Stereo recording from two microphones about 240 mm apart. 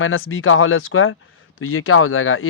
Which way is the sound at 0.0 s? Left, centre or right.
Left.